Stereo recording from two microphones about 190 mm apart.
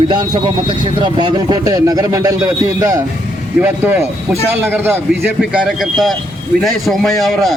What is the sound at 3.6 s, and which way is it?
A man's voice, 10° right (ahead or behind).